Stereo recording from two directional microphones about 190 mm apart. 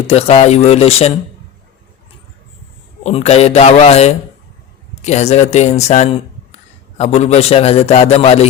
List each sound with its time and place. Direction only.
0.1 s speech: 30° left (ahead or behind)
3.0 s speech: 35° left (ahead or behind)